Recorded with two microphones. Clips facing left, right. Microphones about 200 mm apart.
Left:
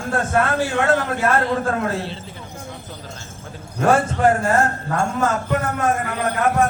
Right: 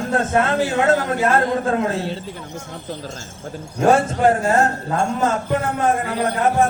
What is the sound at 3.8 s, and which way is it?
A man's voice, 30° right (ahead or behind).